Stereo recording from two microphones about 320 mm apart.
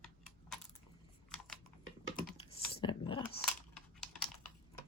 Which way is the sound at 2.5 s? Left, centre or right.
Centre.